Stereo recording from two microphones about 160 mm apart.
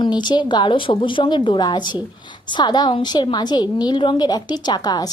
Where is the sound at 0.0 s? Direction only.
25° left (ahead or behind).